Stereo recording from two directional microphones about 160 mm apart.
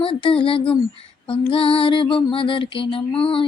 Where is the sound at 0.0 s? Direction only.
35° left (ahead or behind).